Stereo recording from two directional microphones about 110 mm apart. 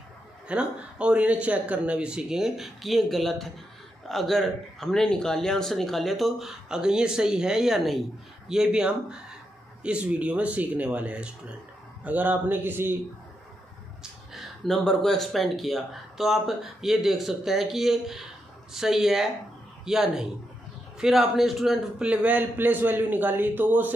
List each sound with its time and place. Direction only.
0.5 s a man's voice: 10° right (ahead or behind)
14.3 s a man's voice: centre (ahead or behind); by 23.9 s 15° right (ahead or behind)